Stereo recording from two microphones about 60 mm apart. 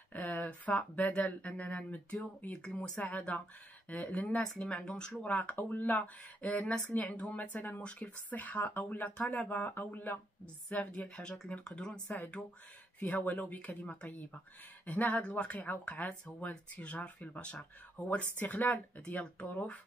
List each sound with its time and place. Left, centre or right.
0.1 s a sound: left
0.5 s speech: left
3.0 s speech: left
5.2 s speech: left
11.1 s speech: centre